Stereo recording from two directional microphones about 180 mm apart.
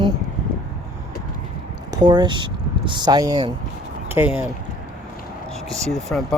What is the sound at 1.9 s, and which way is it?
Speech, 25° right (ahead or behind).